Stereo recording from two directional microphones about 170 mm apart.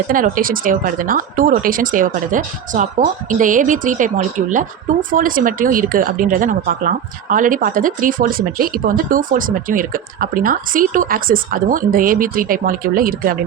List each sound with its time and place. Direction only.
0.1 s speech: 55° right (ahead or behind)